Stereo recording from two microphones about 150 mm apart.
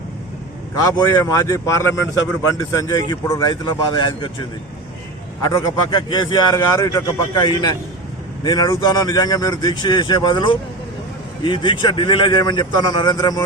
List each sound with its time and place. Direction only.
0.9 s speech: 25° left (ahead or behind)
5.4 s a man's voice: 25° left (ahead or behind)